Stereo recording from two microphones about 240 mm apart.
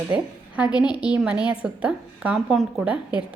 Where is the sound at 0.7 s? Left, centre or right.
Centre.